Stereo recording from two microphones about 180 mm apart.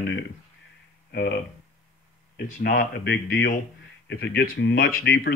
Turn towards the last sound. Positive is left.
turn(degrees=60)  # may be behind; listen again after turning